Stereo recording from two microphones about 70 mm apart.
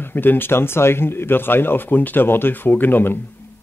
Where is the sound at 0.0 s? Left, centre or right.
Left.